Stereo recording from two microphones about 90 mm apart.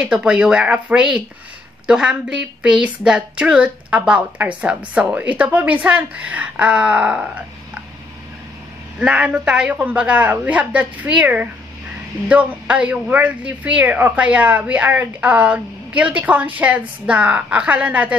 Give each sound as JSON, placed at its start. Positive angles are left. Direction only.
{"t": 0.0, "sound": "speech", "side_deg": -10}
{"t": 9.0, "sound": "speech", "side_deg": -15}